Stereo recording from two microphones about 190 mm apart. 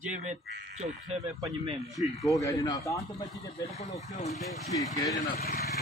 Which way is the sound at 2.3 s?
15° left (ahead or behind).